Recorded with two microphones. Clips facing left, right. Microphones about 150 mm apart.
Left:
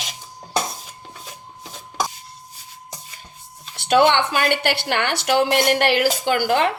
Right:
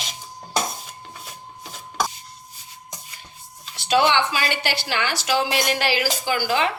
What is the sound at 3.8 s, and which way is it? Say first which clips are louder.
A woman's voice: left 3 dB; 55° left (ahead or behind).